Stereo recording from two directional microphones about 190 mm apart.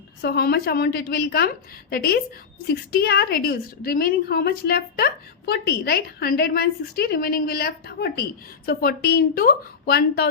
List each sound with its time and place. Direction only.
0.2 s a woman's voice: 55° left (ahead or behind)